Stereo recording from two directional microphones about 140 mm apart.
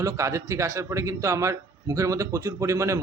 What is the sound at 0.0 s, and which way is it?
A man's voice, 20° right (ahead or behind).